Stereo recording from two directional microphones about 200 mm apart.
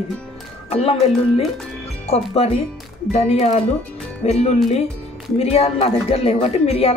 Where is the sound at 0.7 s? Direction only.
30° left (ahead or behind).